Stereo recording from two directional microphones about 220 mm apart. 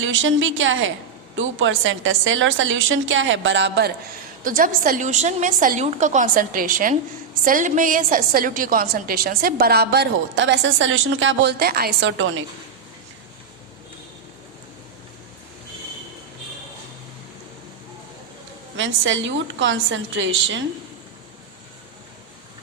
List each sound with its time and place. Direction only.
0.0 s a woman's voice: 60° right (ahead or behind)
4.4 s a woman's voice: 40° right (ahead or behind); by 12.3 s 55° right (ahead or behind)
18.8 s a woman's voice: 60° right (ahead or behind)